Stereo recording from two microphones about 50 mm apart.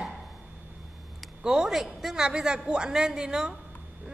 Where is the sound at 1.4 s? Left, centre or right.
Centre.